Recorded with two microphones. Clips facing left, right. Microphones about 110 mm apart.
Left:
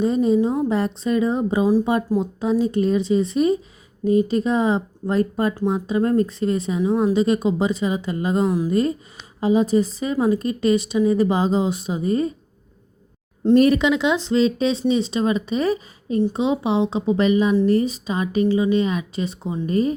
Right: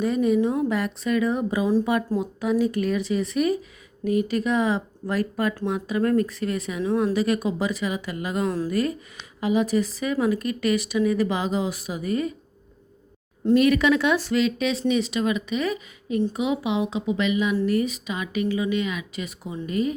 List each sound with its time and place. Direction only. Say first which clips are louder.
0.0 s a sound: left 3 dB; 30° left (ahead or behind)
0.3 s a woman's voice: left 3 dB; 20° left (ahead or behind)
8.4 s speech: left 5 dB; 15° left (ahead or behind)
9.4 s a woman's voice: left 4 dB; 30° left (ahead or behind)
13.4 s speech: left 4 dB; 35° left (ahead or behind)
13.8 s a woman's voice: left 1 dB; 20° left (ahead or behind)